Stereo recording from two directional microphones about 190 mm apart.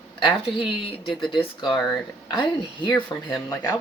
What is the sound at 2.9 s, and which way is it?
Speech, 10° left (ahead or behind).